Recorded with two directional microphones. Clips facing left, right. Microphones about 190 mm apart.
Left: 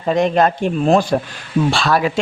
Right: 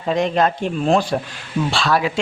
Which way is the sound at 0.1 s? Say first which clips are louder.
Left 3 dB; 50° left (ahead or behind).